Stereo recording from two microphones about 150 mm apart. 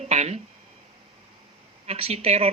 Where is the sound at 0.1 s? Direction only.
45° right (ahead or behind).